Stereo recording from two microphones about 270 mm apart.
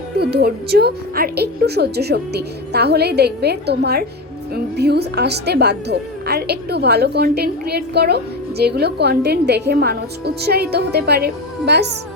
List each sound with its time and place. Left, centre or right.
0.2 s a woman's voice: right